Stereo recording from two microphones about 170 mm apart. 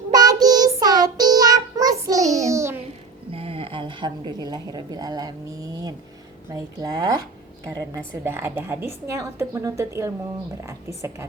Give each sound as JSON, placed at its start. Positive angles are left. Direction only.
{"t": 0.1, "sound": "child singing", "side_deg": -25}
{"t": 3.3, "sound": "a woman's voice", "side_deg": -35}